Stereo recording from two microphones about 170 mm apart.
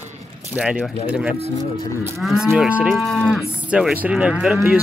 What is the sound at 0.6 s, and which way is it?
Cattle, 5° right (ahead or behind).